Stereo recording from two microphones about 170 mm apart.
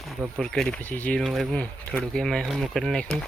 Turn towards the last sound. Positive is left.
turn(degrees=5)  # may be behind; listen again after turning